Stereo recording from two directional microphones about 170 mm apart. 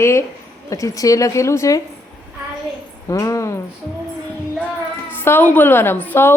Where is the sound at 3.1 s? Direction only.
20° left (ahead or behind).